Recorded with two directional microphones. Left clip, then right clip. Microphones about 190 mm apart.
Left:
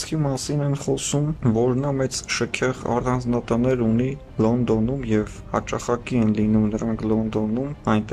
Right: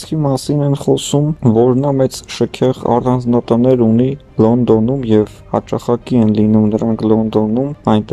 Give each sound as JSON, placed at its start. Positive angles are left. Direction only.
{"t": 0.1, "sound": "speech", "side_deg": -25}